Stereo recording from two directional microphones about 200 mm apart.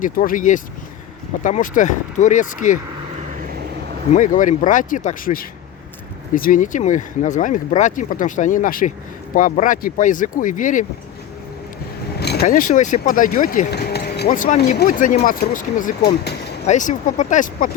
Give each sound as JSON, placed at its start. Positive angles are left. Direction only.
{"t": 0.0, "sound": "speech", "side_deg": 40}
{"t": 4.1, "sound": "speech", "side_deg": 40}
{"t": 12.2, "sound": "vehicle", "side_deg": 55}
{"t": 12.5, "sound": "speech", "side_deg": 40}
{"t": 16.6, "sound": "speech", "side_deg": 40}